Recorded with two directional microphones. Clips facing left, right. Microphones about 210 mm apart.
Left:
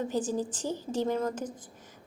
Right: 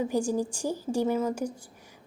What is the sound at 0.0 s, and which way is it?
A woman's voice, 10° right (ahead or behind).